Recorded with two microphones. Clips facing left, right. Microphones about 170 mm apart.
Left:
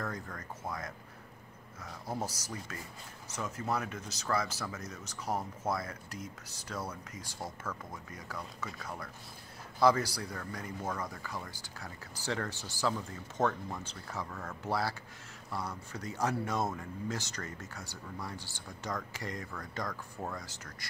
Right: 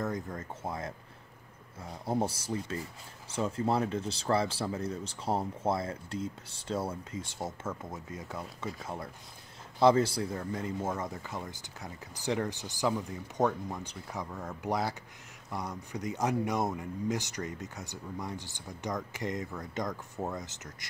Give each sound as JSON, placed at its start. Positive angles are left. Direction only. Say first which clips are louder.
{"t": 0.0, "sound": "speech", "louder": "right 5 dB", "side_deg": -20}